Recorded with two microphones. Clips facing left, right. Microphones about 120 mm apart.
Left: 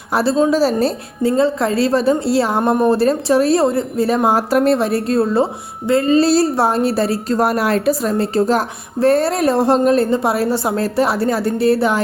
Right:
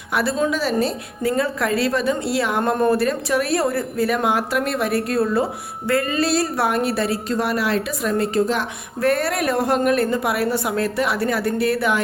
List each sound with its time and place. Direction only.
0.1 s a woman's voice: 30° left (ahead or behind)